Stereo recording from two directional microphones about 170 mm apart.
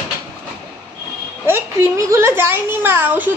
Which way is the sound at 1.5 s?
15° right (ahead or behind).